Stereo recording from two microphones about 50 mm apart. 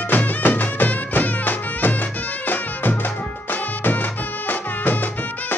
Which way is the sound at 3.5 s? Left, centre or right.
Left.